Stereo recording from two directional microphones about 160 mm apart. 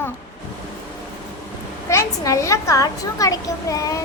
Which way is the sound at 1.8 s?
20° left (ahead or behind).